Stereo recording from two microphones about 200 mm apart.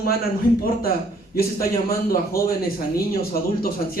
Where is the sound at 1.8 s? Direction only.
50° left (ahead or behind).